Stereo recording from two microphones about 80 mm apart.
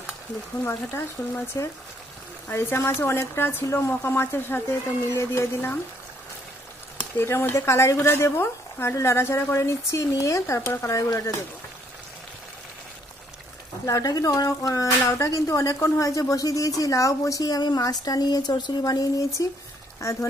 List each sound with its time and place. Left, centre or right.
1.2 s speech: left
7.2 s speech: left
13.8 s speech: left